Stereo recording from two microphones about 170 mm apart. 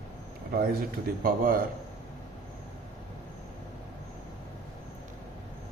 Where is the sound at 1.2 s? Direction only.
60° right (ahead or behind).